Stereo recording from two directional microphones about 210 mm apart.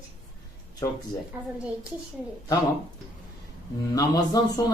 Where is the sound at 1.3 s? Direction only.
10° right (ahead or behind).